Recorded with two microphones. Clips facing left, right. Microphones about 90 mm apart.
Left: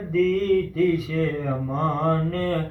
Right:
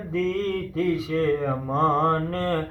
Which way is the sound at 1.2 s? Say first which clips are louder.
Right 2 dB; 30° right (ahead or behind).